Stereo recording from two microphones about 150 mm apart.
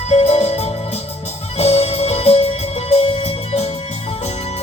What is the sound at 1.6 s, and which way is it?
Music, 45° left (ahead or behind).